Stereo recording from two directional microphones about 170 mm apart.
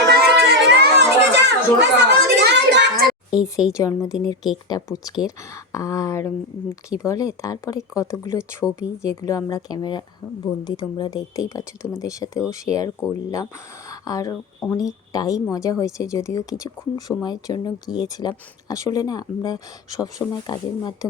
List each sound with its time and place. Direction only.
0.1 s children playing: 70° right (ahead or behind); by 1.9 s 85° right
2.3 s a sound: 85° right
3.5 s speech: 20° left (ahead or behind)
8.6 s speech: 5° right (ahead or behind)
9.0 s speech: 20° left (ahead or behind)